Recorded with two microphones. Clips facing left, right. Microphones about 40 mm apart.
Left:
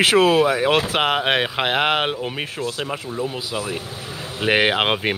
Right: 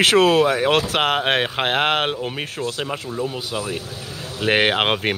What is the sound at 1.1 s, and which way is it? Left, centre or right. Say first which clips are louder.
Speech: even; centre.